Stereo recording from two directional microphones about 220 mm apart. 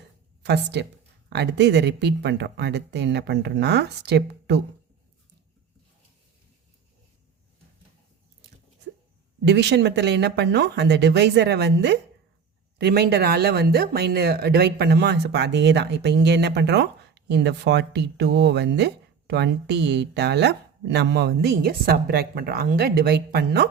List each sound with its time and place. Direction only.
0.4 s speech: 50° right (ahead or behind)
9.4 s speech: 50° right (ahead or behind)